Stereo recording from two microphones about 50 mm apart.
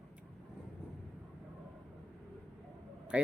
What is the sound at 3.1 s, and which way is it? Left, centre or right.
Speech, right.